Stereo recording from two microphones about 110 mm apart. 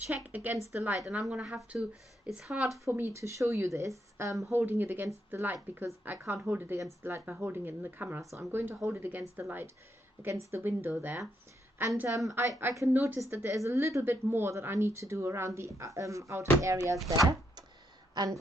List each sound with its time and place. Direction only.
0.1 s speech: 15° right (ahead or behind)
2.9 s a woman's voice: 25° right (ahead or behind)
12.3 s a woman's voice: 25° right (ahead or behind)
17.1 s speech: 40° right (ahead or behind)